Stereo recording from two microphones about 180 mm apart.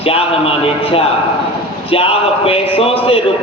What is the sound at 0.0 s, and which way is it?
A man's voice, 30° left (ahead or behind).